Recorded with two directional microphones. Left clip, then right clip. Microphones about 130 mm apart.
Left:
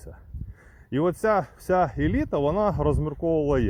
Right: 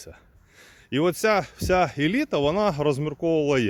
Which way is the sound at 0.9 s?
15° right (ahead or behind).